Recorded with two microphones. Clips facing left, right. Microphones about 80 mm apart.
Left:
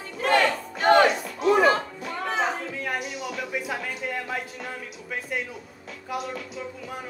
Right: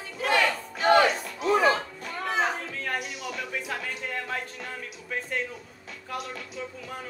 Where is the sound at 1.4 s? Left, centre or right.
Left.